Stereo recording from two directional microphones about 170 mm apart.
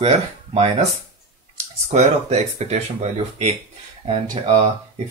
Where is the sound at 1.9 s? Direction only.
35° right (ahead or behind).